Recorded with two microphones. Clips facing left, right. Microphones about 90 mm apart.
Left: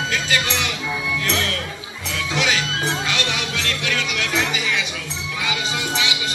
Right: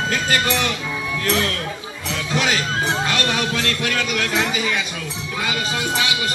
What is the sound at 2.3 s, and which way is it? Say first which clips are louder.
Music: right 2 dB; 40° right (ahead or behind).